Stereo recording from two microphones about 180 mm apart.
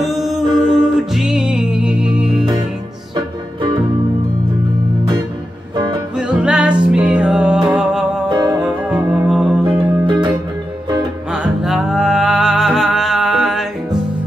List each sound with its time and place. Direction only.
0.0 s music: centre (ahead or behind)
6.1 s music: 5° right (ahead or behind)
8.3 s music: 20° right (ahead or behind)
8.5 s music: 5° right (ahead or behind)
10.0 s music: 25° right (ahead or behind)
11.3 s music: 5° right (ahead or behind)